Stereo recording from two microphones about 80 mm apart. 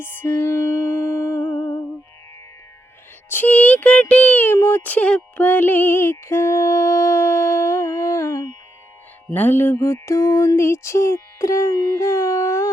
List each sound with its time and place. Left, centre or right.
0.0 s music: left
3.2 s music: left
9.3 s music: left
9.7 s music: left
11.7 s a sound: left